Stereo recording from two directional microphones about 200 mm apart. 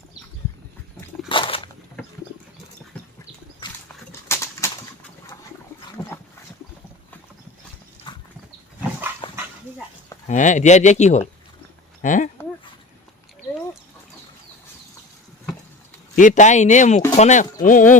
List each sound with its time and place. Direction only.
1.3 s a sound: 25° left (ahead or behind)
4.3 s bird: 15° left (ahead or behind)
8.1 s horse: 25° left (ahead or behind)
9.2 s dog: 25° left (ahead or behind)
10.2 s speech: 40° left (ahead or behind)
16.1 s speech: 40° left (ahead or behind)